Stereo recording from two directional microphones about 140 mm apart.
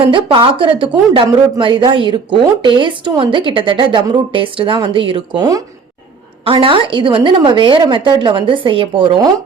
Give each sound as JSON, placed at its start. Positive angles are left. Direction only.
{"t": 0.1, "sound": "speech", "side_deg": -35}
{"t": 6.4, "sound": "speech", "side_deg": -40}